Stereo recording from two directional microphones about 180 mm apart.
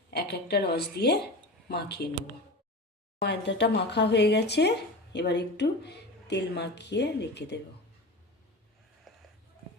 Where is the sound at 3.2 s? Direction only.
70° left (ahead or behind).